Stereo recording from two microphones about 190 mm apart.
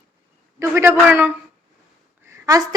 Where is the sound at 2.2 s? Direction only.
15° right (ahead or behind).